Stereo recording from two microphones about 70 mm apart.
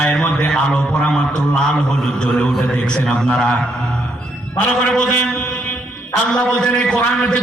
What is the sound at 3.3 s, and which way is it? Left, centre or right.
Speech, centre.